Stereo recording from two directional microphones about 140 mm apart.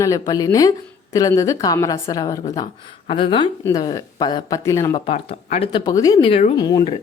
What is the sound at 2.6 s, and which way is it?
Speech, 40° left (ahead or behind).